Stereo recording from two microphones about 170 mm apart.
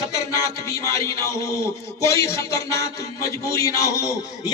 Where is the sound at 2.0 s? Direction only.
15° left (ahead or behind).